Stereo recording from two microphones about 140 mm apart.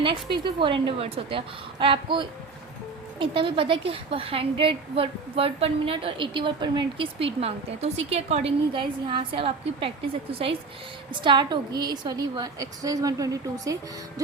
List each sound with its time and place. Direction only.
0.0 s a woman's voice: 35° right (ahead or behind)
11.1 s a woman's voice: 35° right (ahead or behind)